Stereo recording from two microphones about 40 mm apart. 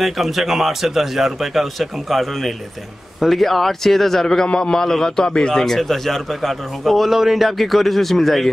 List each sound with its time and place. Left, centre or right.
0.0 s a man's voice: centre; by 5.5 s left
5.5 s a man's voice: centre